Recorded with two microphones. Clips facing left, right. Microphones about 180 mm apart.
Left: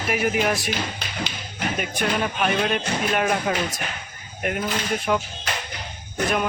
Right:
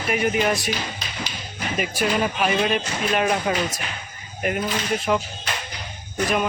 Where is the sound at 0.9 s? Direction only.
60° left (ahead or behind).